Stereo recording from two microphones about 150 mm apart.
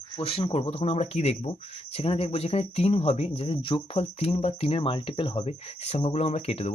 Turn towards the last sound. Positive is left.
turn(degrees=45)  # may be behind; listen again after turning